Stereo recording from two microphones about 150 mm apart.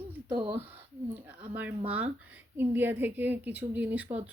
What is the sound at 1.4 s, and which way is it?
Speech, 10° right (ahead or behind).